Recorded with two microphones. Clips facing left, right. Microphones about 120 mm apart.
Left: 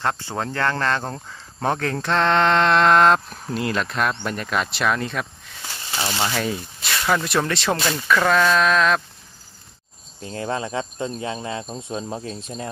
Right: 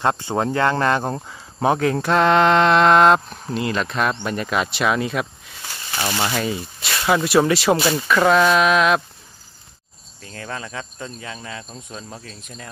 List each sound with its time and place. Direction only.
0.0 s speech: 20° right (ahead or behind)
10.2 s speech: 25° left (ahead or behind)